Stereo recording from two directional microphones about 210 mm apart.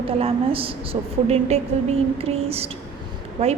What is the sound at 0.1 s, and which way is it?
A woman's voice, 25° right (ahead or behind).